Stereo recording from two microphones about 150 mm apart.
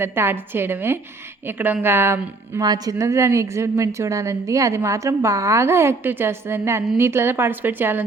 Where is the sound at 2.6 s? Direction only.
25° right (ahead or behind).